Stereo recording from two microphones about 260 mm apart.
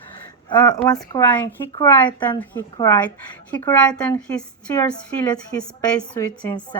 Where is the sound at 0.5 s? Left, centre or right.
Centre.